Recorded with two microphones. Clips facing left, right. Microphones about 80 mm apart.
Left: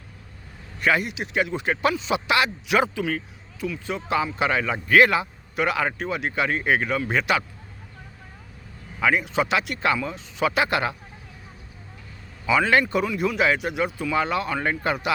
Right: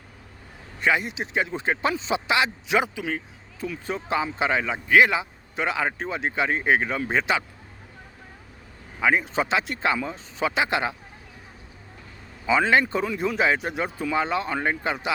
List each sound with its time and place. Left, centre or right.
0.8 s speech: right
3.6 s speech: right
4.2 s speech: right
9.0 s speech: right
12.5 s speech: right
14.6 s speech: centre